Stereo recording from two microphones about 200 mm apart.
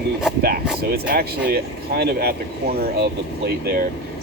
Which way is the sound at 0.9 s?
50° right (ahead or behind).